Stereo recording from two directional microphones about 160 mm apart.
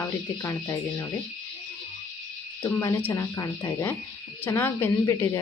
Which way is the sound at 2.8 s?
15° left (ahead or behind).